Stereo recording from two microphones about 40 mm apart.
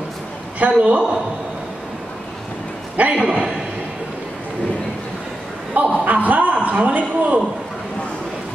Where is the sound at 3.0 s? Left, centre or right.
Right.